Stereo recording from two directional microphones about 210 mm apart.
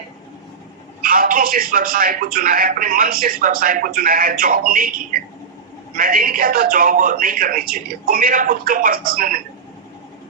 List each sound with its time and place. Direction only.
1.0 s speech: 40° right (ahead or behind)
5.9 s speech: 45° right (ahead or behind)